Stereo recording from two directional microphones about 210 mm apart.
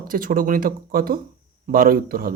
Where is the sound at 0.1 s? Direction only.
40° right (ahead or behind).